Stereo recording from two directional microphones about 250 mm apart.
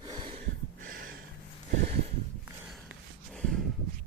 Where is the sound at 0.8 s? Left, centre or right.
Right.